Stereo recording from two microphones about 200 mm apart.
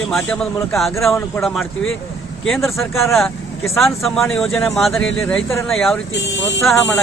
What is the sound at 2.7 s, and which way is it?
Speech, 15° left (ahead or behind).